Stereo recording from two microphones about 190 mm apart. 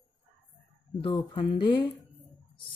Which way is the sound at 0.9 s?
25° left (ahead or behind).